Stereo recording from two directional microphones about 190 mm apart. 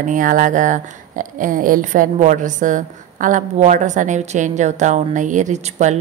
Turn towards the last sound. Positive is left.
turn(degrees=-40)  # may be behind; listen again after turning